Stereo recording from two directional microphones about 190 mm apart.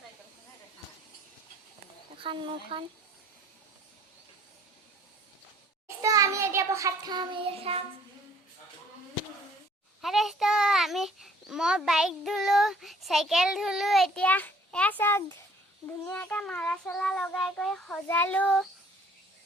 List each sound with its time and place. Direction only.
2.2 s speech: 25° right (ahead or behind)
6.0 s child singing: 15° right (ahead or behind)
10.0 s a child's voice: centre (ahead or behind)